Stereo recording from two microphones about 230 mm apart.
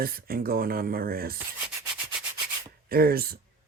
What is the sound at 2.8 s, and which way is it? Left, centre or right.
Speech, right.